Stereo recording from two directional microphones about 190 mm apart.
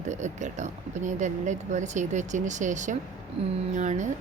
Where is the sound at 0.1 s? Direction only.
40° right (ahead or behind).